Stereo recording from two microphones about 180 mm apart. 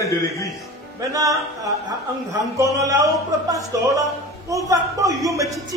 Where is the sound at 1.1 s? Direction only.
20° right (ahead or behind).